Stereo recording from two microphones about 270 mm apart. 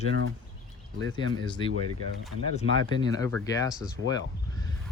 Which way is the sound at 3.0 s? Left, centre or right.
Centre.